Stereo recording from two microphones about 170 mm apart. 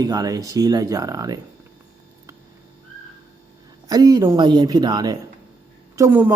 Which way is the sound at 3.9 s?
20° right (ahead or behind).